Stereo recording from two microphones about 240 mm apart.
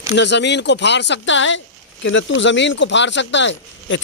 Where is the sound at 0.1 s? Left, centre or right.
Left.